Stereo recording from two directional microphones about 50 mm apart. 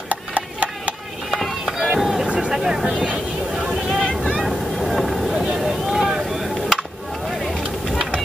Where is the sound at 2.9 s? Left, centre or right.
Right.